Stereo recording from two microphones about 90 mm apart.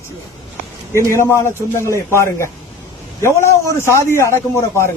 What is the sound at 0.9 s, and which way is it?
A man's voice, 30° left (ahead or behind).